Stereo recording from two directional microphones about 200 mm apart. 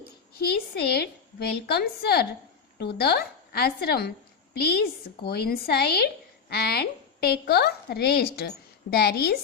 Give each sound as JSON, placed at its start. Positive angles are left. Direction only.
{"t": 0.3, "sound": "a woman's voice", "side_deg": 50}
{"t": 5.2, "sound": "a woman's voice", "side_deg": 50}